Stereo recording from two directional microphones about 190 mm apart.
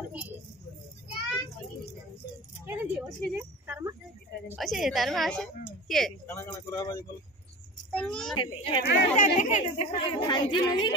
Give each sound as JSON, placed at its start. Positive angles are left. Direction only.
{"t": 2.6, "sound": "keys jangling", "side_deg": -5}
{"t": 3.3, "sound": "a sound", "side_deg": -15}
{"t": 4.6, "sound": "a woman's voice", "side_deg": 0}
{"t": 6.3, "sound": "speech", "side_deg": 15}
{"t": 7.9, "sound": "a woman's voice", "side_deg": 5}
{"t": 8.4, "sound": "speech", "side_deg": 25}
{"t": 8.8, "sound": "speech", "side_deg": 50}
{"t": 9.3, "sound": "speech", "side_deg": 40}
{"t": 9.9, "sound": "speech", "side_deg": 25}